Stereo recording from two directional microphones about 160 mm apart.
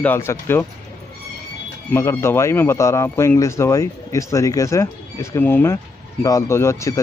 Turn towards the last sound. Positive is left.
turn(degrees=20)  # may be behind; listen again after turning